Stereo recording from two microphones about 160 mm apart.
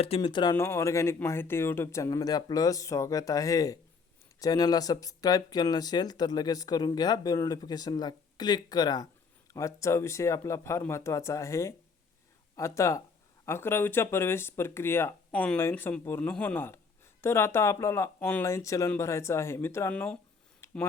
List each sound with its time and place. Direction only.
0.0 s speech: 35° left (ahead or behind)
0.5 s speech: 15° left (ahead or behind)
20.6 s a sound: 15° left (ahead or behind)